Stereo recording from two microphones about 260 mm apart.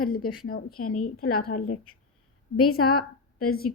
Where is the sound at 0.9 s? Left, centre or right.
Left.